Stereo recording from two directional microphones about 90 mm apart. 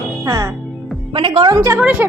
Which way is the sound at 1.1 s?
85° right.